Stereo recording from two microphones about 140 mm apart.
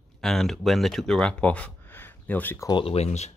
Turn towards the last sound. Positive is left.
turn(degrees=50)  # may be behind; listen again after turning